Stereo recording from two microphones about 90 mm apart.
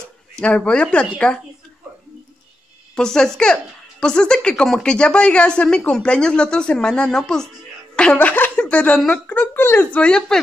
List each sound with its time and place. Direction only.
0.4 s speech: 10° left (ahead or behind)
3.0 s speech: 5° left (ahead or behind); by 9.8 s 25° left (ahead or behind)
9.9 s speech: 10° left (ahead or behind)